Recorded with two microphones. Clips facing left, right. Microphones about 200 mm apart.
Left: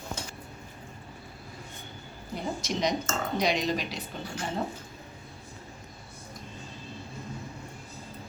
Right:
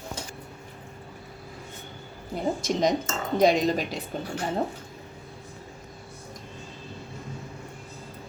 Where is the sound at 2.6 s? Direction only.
50° right (ahead or behind).